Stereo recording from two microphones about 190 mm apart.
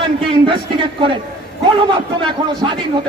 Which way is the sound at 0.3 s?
25° right (ahead or behind).